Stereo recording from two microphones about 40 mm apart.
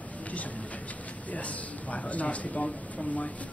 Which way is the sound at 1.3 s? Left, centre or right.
Left.